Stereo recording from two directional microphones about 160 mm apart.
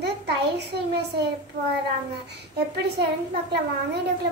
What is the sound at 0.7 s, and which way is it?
Speech, 90° right.